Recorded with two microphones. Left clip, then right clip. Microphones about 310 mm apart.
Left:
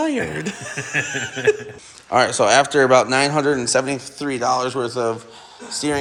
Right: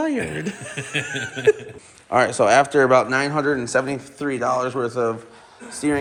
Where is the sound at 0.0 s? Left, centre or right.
Centre.